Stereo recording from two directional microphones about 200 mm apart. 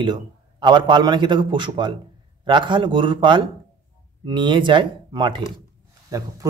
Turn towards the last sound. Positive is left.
turn(degrees=-20)  # may be behind; listen again after turning